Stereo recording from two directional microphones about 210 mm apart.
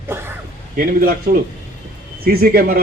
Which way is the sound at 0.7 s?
45° right (ahead or behind).